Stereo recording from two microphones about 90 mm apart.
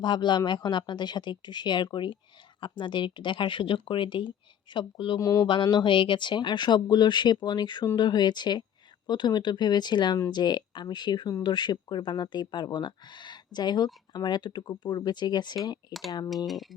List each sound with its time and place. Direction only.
0.0 s speech: 55° left (ahead or behind)
5.2 s speech: 35° left (ahead or behind)
5.6 s speech: 60° left (ahead or behind)
15.9 s speech: centre (ahead or behind)